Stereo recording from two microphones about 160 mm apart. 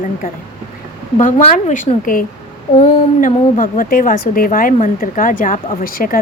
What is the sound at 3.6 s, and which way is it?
Speech, 60° left (ahead or behind).